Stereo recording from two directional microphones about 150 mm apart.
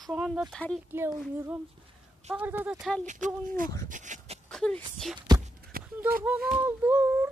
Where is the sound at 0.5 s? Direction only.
10° left (ahead or behind).